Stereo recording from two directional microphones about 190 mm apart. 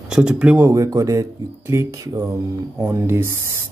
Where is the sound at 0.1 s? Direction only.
5° right (ahead or behind).